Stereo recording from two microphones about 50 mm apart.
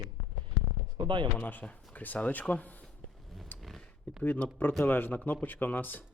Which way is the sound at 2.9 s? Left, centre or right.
Centre.